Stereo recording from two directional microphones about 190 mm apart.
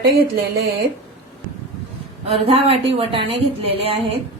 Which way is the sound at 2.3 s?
30° right (ahead or behind).